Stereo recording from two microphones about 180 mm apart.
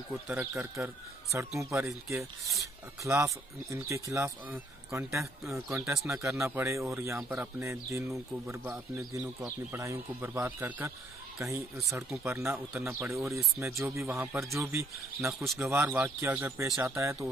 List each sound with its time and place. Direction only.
0.6 s speech: 15° right (ahead or behind)
15.3 s speech: centre (ahead or behind)
15.6 s speech: 15° right (ahead or behind)